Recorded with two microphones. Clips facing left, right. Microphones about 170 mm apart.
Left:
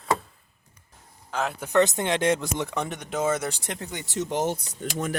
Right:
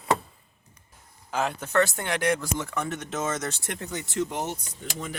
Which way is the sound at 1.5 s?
15° left (ahead or behind).